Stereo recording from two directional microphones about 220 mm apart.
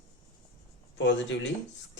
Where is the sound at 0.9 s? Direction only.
55° left (ahead or behind).